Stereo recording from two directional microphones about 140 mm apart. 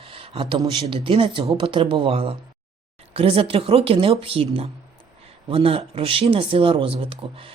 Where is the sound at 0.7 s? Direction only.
35° right (ahead or behind).